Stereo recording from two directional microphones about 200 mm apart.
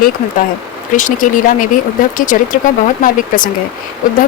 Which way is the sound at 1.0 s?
40° left (ahead or behind).